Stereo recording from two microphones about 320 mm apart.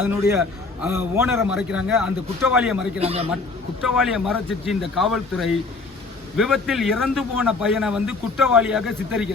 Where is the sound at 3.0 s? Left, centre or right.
Centre.